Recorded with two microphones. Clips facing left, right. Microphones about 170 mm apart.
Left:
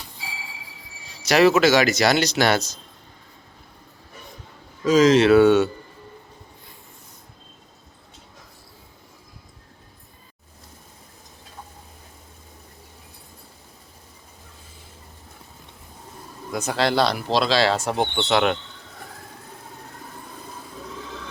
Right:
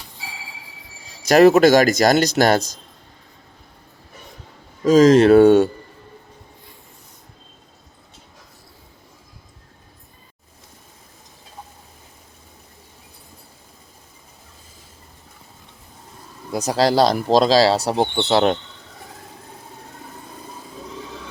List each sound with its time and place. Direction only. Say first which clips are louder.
1.3 s speech: right 5 dB; 45° right (ahead or behind)
4.8 s speech: right 4 dB; 45° right (ahead or behind)
16.5 s speech: right 4 dB; 35° right (ahead or behind)